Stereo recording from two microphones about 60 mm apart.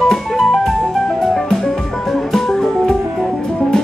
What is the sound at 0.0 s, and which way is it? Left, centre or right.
Music, centre.